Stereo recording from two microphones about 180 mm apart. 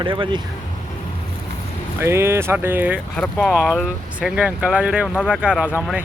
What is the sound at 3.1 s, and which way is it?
Speech, 5° left (ahead or behind).